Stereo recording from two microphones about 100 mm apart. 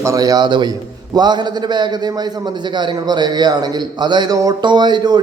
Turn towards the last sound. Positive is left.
turn(degrees=-45)  # may be behind; listen again after turning